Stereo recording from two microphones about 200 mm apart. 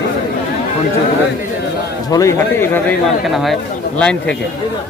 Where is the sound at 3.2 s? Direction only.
Centre (ahead or behind).